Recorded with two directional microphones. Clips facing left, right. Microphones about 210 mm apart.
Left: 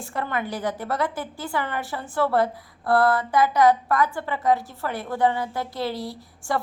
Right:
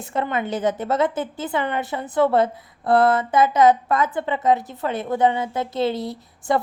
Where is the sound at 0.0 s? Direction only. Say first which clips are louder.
Right 4 dB; 20° right (ahead or behind).